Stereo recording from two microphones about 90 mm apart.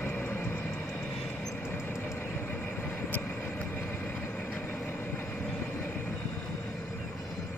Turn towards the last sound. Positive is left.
turn(degrees=20)  # may be behind; listen again after turning